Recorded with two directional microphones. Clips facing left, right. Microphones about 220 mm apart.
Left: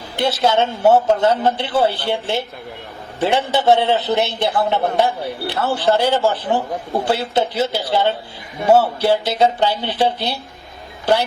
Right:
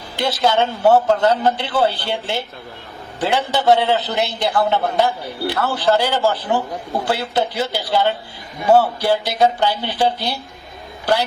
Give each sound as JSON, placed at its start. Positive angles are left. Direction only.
{"t": 0.2, "sound": "a man's voice", "side_deg": 25}